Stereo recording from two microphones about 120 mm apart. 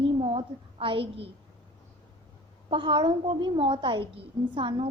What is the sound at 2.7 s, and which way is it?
A woman's voice, 45° right (ahead or behind).